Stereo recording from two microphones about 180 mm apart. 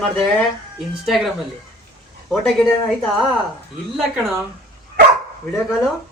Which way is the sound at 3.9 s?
Centre (ahead or behind).